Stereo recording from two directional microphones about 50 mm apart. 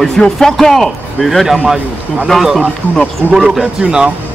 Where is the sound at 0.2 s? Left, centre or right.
Centre.